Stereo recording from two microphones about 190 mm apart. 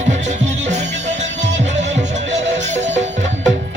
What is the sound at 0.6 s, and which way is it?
Music, 40° right (ahead or behind).